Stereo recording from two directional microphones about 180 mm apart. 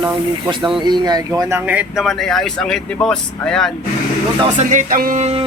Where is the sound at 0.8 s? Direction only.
25° right (ahead or behind); by 3.7 s 5° left (ahead or behind).